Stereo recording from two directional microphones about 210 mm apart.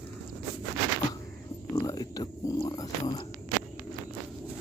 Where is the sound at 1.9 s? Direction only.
20° left (ahead or behind).